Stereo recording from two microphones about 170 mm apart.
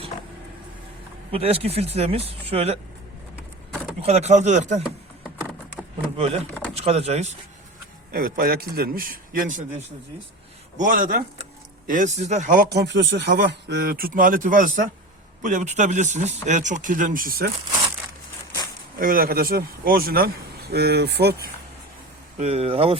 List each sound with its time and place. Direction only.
1.3 s speech: 35° right (ahead or behind)
4.0 s speech: 40° right (ahead or behind)
4.8 s a sound: centre (ahead or behind)
6.1 s speech: 35° right (ahead or behind)
8.1 s speech: 55° right (ahead or behind)
10.8 s speech: 50° right (ahead or behind)
12.6 s speech: 75° right (ahead or behind); by 17.5 s 60° right (ahead or behind)
18.9 s speech: 55° right (ahead or behind)
22.4 s speech: 35° right (ahead or behind)